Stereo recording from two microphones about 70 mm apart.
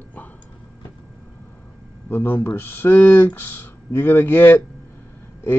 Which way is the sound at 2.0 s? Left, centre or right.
Left.